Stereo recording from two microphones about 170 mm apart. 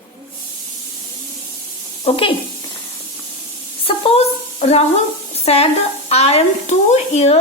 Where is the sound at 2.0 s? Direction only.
30° left (ahead or behind).